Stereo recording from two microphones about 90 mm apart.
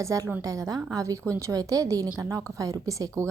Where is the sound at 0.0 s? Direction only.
40° right (ahead or behind).